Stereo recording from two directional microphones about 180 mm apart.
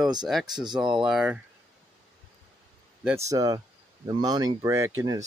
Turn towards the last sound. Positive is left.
turn(degrees=-15)  # may be behind; listen again after turning